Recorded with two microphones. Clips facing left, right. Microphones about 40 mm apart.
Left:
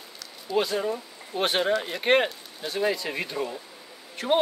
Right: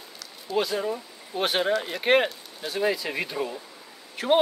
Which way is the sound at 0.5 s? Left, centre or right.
Centre.